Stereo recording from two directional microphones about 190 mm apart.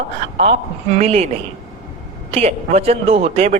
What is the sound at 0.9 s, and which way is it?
Speech, 35° right (ahead or behind).